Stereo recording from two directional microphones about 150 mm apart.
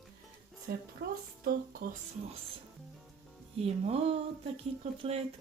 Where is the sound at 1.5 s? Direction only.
70° right (ahead or behind).